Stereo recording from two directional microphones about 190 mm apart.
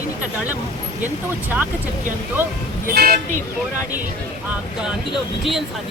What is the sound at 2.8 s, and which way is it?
Speech, 50° right (ahead or behind).